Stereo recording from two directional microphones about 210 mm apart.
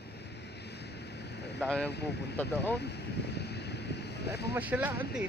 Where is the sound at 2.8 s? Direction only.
55° left (ahead or behind).